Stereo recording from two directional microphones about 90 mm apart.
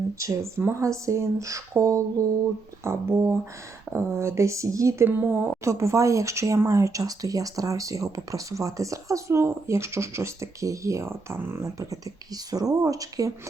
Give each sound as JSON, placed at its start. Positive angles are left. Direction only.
{"t": 0.2, "sound": "a woman's voice", "side_deg": -35}
{"t": 5.0, "sound": "a woman's voice", "side_deg": -25}